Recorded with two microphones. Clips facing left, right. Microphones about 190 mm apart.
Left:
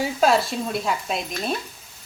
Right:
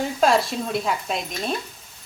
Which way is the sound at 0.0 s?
Centre (ahead or behind).